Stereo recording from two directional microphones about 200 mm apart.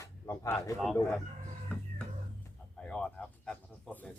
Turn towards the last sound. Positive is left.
turn(degrees=5)  # may be behind; listen again after turning